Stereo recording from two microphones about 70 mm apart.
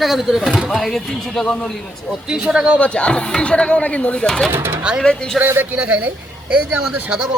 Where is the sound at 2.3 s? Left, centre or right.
Centre.